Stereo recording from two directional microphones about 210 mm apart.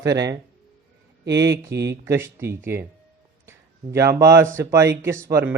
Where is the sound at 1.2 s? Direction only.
55° right (ahead or behind).